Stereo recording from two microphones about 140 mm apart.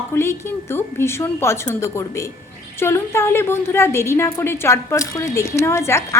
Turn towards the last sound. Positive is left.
turn(degrees=20)  # may be behind; listen again after turning